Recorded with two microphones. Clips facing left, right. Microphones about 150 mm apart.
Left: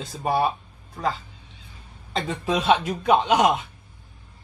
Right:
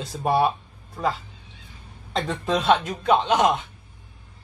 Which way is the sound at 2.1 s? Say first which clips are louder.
Right 1 dB; centre (ahead or behind).